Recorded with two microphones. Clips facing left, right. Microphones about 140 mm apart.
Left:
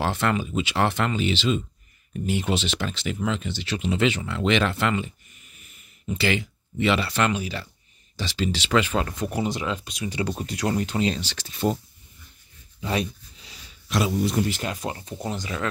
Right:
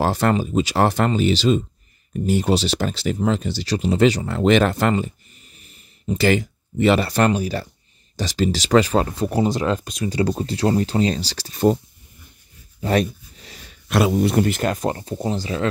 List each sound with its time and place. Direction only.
0.0 s speech: 40° right (ahead or behind)
12.8 s speech: 50° right (ahead or behind)
15.1 s speech: 30° right (ahead or behind)